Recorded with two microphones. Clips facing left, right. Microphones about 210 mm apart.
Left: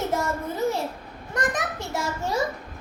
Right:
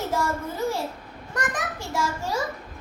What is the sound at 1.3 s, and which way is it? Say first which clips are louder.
A child's voice: left 3 dB; 20° left (ahead or behind).